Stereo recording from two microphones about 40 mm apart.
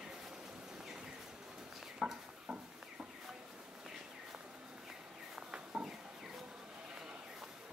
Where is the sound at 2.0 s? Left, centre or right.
Centre.